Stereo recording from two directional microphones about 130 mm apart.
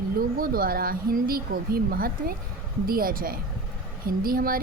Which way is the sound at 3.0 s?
90° right.